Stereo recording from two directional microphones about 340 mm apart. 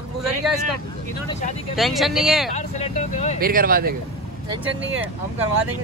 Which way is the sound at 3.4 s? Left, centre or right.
Right.